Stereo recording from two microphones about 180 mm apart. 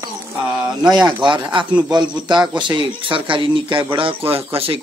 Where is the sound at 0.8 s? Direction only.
5° right (ahead or behind).